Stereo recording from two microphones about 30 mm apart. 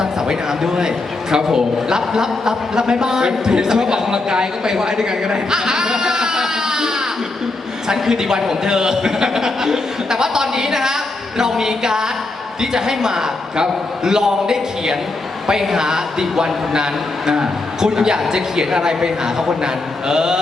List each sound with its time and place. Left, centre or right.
0.0 s a man's voice: right
8.1 s a man's voice: centre